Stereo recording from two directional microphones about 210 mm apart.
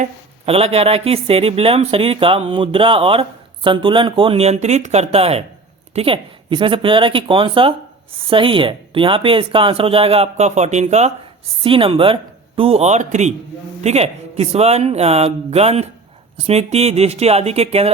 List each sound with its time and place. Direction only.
0.0 s speech: 30° right (ahead or behind)